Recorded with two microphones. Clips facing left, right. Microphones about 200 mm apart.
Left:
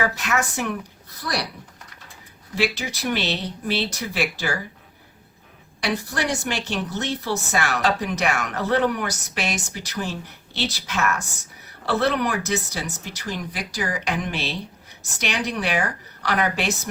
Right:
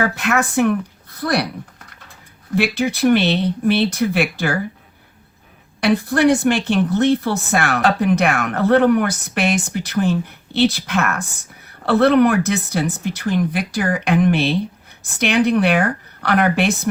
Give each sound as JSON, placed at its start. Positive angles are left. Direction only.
{"t": 0.0, "sound": "a woman's voice", "side_deg": -55}
{"t": 2.6, "sound": "a woman's voice", "side_deg": -55}
{"t": 5.8, "sound": "a woman's voice", "side_deg": -55}